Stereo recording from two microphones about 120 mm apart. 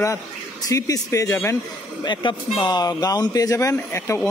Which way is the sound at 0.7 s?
30° left (ahead or behind).